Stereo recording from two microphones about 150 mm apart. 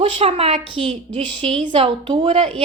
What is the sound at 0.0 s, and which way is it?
Speech, 40° right (ahead or behind).